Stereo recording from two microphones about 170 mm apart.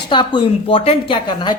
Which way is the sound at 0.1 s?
25° left (ahead or behind).